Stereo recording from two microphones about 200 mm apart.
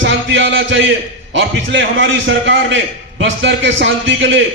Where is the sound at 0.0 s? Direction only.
65° right (ahead or behind).